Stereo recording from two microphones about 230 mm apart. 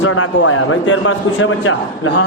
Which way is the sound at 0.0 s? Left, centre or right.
Left.